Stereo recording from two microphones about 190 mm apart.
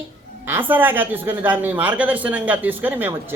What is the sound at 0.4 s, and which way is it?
A man's voice, 10° right (ahead or behind).